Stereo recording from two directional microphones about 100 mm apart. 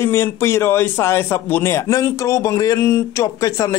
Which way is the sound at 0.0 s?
25° left (ahead or behind).